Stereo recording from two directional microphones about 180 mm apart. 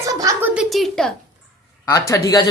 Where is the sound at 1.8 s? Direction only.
15° left (ahead or behind).